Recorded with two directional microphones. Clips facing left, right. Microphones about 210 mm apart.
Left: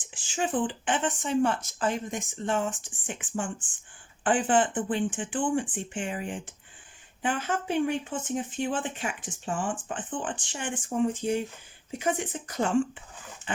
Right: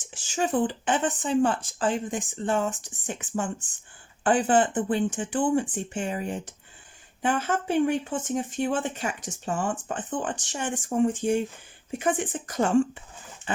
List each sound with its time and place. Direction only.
0.0 s speech: 45° right (ahead or behind)